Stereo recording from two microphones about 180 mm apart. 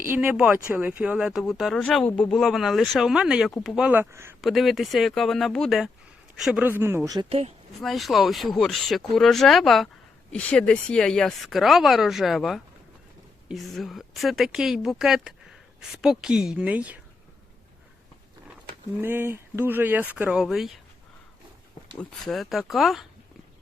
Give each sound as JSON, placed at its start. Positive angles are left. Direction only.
{"t": 0.0, "sound": "speech", "side_deg": -10}
{"t": 4.4, "sound": "speech", "side_deg": 0}
{"t": 7.3, "sound": "speech", "side_deg": -35}
{"t": 7.8, "sound": "speech", "side_deg": 0}
{"t": 19.0, "sound": "speech", "side_deg": -10}
{"t": 21.9, "sound": "speech", "side_deg": 0}